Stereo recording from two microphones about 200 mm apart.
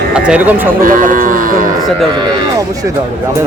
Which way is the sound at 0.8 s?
45° right (ahead or behind).